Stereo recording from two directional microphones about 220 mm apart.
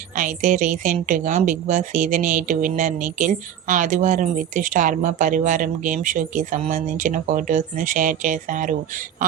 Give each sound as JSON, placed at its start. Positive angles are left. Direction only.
{"t": 0.2, "sound": "a woman's voice", "side_deg": -35}